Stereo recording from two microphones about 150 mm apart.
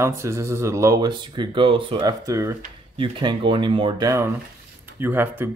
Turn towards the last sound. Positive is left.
turn(degrees=-15)  # may be behind; listen again after turning